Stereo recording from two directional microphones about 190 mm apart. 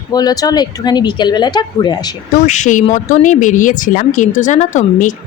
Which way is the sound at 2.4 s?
40° left (ahead or behind).